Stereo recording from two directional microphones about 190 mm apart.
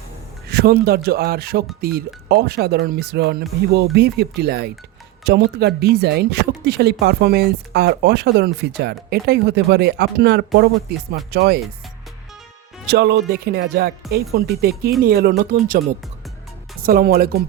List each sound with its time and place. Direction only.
0.4 s speech: 55° right (ahead or behind)
12.9 s speech: 60° right (ahead or behind)